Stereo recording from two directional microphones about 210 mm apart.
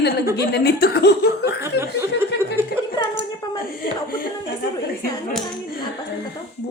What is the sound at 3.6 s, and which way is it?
Speech, 45° left (ahead or behind).